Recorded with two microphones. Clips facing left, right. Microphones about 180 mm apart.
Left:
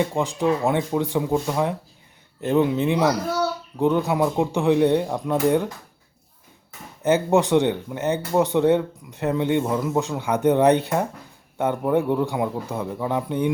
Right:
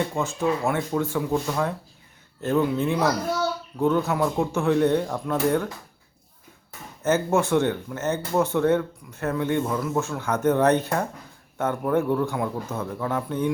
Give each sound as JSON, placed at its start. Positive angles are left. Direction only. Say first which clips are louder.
{"t": 0.1, "sound": "speech", "louder": "left 3 dB", "side_deg": 15}
{"t": 7.0, "sound": "speech", "louder": "left 3 dB", "side_deg": 15}